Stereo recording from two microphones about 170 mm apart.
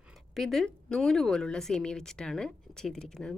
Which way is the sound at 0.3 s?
Centre (ahead or behind).